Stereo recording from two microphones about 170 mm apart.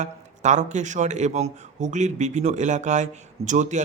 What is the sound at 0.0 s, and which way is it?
Speech, 45° right (ahead or behind).